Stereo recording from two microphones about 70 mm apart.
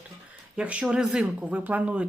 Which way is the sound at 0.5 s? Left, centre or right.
Centre.